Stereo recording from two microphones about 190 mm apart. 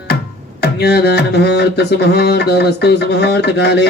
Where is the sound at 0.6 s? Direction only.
60° left (ahead or behind).